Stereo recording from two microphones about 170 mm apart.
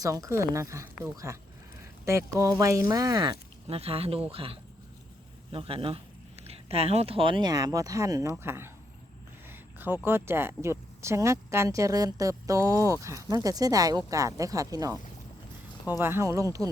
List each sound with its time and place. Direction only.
0.0 s speech: 20° right (ahead or behind)